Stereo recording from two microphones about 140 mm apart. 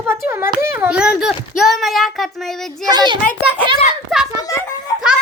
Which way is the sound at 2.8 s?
30° right (ahead or behind).